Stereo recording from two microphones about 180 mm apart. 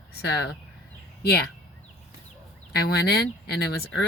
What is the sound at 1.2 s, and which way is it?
Speech, 60° left (ahead or behind).